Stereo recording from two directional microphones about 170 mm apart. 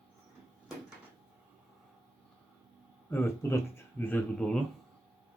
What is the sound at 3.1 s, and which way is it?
Speech, 15° left (ahead or behind).